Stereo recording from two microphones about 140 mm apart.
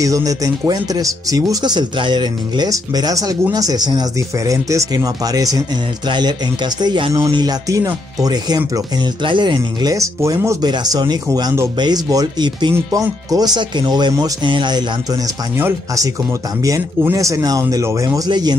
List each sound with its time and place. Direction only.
0.0 s speech: 25° right (ahead or behind)
12.7 s speech: 20° right (ahead or behind)
15.5 s speech: 20° right (ahead or behind)